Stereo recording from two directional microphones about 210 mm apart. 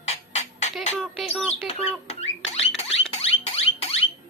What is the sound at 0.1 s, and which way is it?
Music, 30° left (ahead or behind).